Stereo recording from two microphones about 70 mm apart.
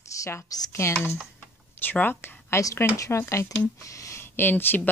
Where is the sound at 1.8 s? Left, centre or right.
Left.